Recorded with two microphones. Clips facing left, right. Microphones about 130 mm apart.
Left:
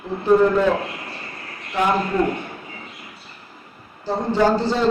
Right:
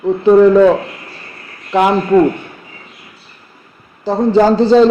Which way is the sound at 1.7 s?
90° right.